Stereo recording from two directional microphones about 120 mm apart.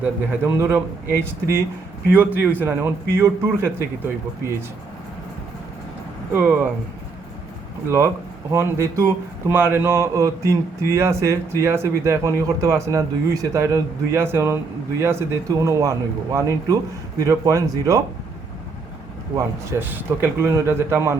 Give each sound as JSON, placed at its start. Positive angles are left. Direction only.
{"t": 0.0, "sound": "a man's voice", "side_deg": -20}
{"t": 6.3, "sound": "a man's voice", "side_deg": -15}
{"t": 7.9, "sound": "speech", "side_deg": -20}
{"t": 19.4, "sound": "speech", "side_deg": -20}